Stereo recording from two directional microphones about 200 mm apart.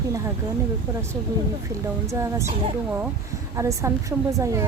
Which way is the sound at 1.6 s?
15° right (ahead or behind).